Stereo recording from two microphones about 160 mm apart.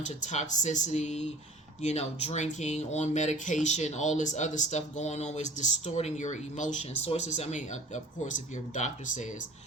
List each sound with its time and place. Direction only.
0.0 s speech: 45° left (ahead or behind)